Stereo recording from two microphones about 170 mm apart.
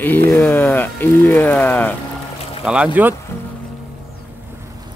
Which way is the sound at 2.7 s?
5° right (ahead or behind).